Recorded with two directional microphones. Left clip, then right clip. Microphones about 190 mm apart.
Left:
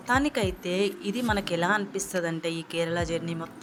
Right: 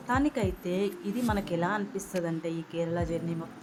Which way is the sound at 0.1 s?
35° left (ahead or behind).